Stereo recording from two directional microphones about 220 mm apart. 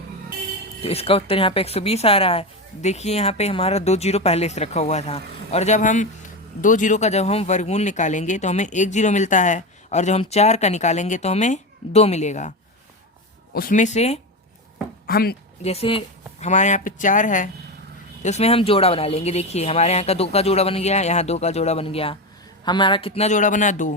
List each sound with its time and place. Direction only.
0.8 s speech: 25° left (ahead or behind)
15.0 s speech: 45° left (ahead or behind)
15.6 s speech: 25° left (ahead or behind)